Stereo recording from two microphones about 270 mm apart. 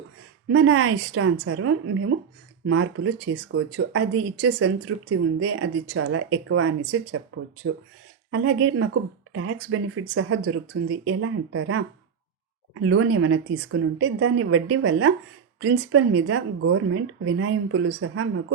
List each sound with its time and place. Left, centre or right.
0.4 s speech: right